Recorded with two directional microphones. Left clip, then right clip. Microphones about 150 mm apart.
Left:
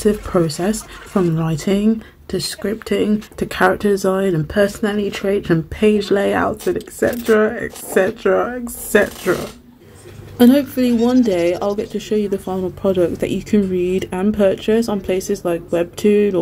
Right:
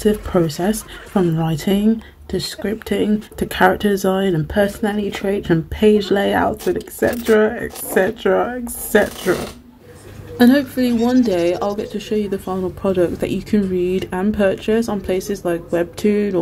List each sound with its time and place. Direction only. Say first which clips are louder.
0.0 s speech: even; 15° right (ahead or behind)
10.3 s speech: left 1 dB; 5° right (ahead or behind)